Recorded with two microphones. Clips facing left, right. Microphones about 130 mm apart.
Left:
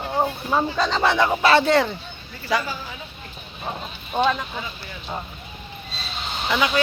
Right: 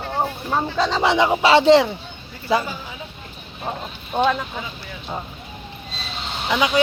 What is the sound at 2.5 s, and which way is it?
Speech, 30° right (ahead or behind).